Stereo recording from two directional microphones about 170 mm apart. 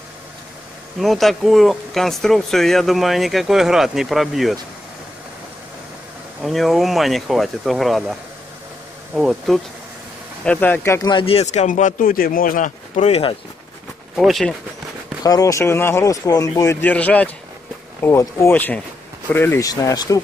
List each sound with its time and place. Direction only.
0.9 s speech: centre (ahead or behind)
6.4 s speech: centre (ahead or behind)
10.4 s speech: 10° left (ahead or behind)
11.1 s speech: 30° left (ahead or behind)
14.1 s speech: centre (ahead or behind)
15.2 s speech: 20° left (ahead or behind)